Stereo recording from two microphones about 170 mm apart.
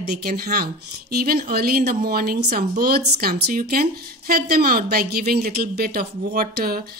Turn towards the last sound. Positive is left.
turn(degrees=-55)  # may be behind; listen again after turning